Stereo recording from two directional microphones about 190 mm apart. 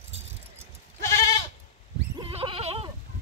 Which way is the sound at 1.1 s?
15° left (ahead or behind).